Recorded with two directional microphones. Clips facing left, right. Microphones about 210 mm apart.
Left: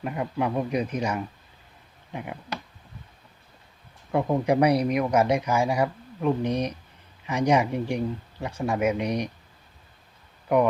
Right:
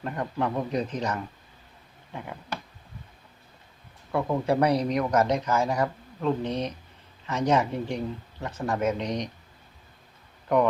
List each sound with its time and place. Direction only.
0.0 s speech: 10° left (ahead or behind)
4.1 s speech: 20° left (ahead or behind)
10.5 s speech: 10° left (ahead or behind)